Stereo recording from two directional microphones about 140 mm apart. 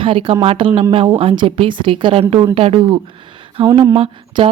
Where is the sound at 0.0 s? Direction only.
40° right (ahead or behind).